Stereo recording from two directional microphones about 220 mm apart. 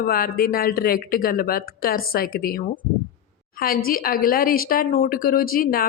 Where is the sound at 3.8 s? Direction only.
40° left (ahead or behind).